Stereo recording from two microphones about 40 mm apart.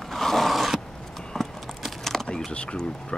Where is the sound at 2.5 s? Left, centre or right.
Left.